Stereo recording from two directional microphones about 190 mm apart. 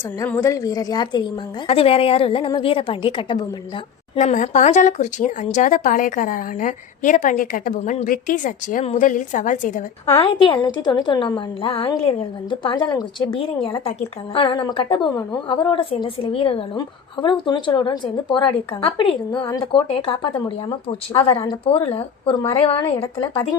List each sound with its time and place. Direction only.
0.2 s a woman's voice: 15° left (ahead or behind)
4.1 s a woman's voice: 40° left (ahead or behind)
10.2 s a woman's voice: 25° left (ahead or behind)